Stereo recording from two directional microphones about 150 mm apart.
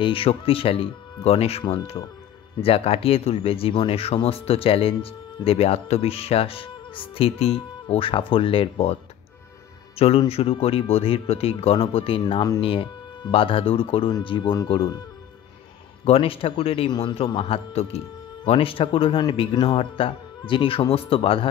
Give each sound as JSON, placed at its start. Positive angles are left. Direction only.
{"t": 0.0, "sound": "speech", "side_deg": 35}
{"t": 9.9, "sound": "speech", "side_deg": 40}
{"t": 12.2, "sound": "speech", "side_deg": 30}
{"t": 16.1, "sound": "speech", "side_deg": 40}